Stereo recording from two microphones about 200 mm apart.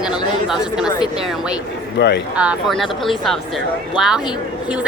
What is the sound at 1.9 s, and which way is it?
Speech, 60° left (ahead or behind).